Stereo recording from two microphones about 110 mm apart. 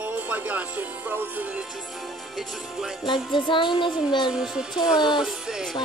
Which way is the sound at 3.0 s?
45° left (ahead or behind).